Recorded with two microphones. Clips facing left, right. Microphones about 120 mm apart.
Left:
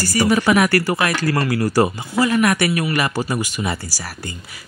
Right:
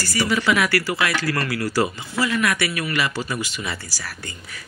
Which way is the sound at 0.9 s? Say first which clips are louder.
Left 4 dB; 30° left (ahead or behind).